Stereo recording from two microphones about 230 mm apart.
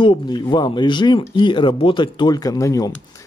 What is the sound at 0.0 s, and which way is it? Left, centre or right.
Speech, left.